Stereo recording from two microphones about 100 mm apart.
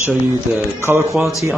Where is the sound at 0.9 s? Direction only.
25° right (ahead or behind).